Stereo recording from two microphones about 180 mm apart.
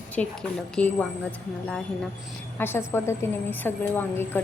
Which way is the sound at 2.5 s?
10° left (ahead or behind).